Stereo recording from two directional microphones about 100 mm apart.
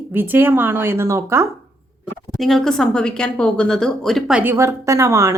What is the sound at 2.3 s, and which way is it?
A woman's voice, 5° left (ahead or behind).